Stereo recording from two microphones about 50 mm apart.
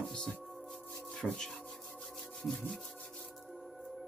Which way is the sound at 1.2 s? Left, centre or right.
Centre.